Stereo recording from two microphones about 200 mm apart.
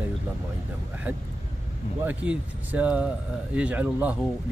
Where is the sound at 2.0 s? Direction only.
5° right (ahead or behind).